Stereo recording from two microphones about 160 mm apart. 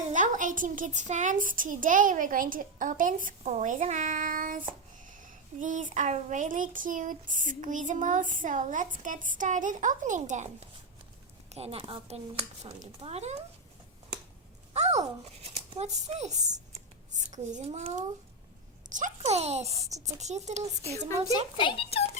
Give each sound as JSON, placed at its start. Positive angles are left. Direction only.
{"t": 0.1, "sound": "a woman's voice", "side_deg": -55}
{"t": 14.7, "sound": "a child's voice", "side_deg": -45}
{"t": 21.6, "sound": "speech", "side_deg": 35}